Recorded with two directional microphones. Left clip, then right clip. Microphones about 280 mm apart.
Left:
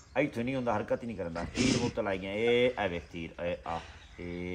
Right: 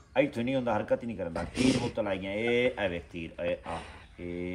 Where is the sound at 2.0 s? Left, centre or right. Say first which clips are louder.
Right 1 dB; centre.